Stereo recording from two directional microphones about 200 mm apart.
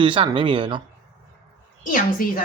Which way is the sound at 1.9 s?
45° left (ahead or behind).